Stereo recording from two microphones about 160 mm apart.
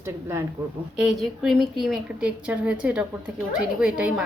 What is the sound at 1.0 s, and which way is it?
A woman's voice, centre (ahead or behind).